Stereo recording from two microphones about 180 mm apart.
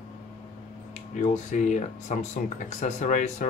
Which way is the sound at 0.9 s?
40° left (ahead or behind).